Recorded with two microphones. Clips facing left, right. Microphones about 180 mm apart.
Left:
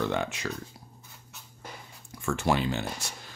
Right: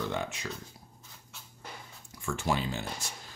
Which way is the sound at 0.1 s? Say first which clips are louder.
Left 4 dB; 70° left (ahead or behind).